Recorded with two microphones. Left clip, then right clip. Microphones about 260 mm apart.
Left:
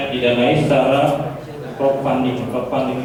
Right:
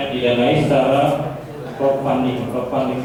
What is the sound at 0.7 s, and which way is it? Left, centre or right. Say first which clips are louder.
A man's voice: left 1 dB; centre.